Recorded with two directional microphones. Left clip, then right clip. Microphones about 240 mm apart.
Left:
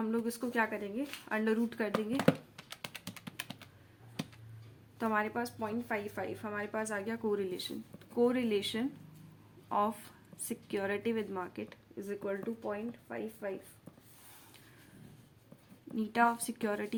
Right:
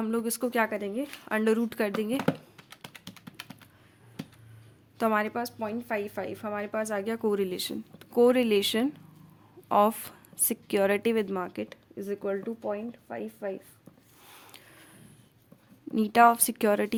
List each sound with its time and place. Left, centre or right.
0.0 s a woman's voice: right
2.2 s computer keyboard: centre
4.9 s a woman's voice: right
16.0 s a woman's voice: right